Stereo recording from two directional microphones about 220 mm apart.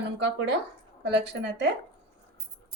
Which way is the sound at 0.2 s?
55° right (ahead or behind).